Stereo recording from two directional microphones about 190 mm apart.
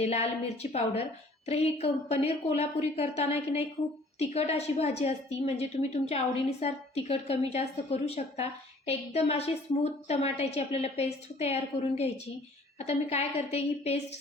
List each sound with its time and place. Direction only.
0.0 s a woman's voice: 35° left (ahead or behind)